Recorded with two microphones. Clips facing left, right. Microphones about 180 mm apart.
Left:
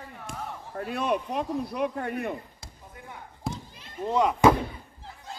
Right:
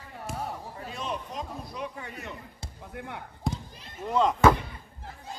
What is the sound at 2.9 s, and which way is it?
Speech, 65° right (ahead or behind).